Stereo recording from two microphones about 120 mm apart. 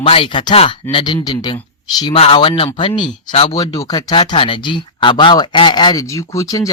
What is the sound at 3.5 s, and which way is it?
Speech, 30° left (ahead or behind).